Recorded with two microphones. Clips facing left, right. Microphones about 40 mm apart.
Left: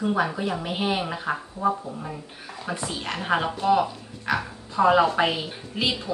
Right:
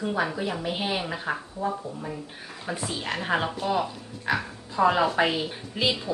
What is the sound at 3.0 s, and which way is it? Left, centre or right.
Speech, centre.